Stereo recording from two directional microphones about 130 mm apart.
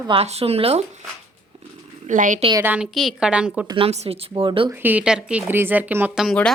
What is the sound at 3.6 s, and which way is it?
Speech, 40° right (ahead or behind).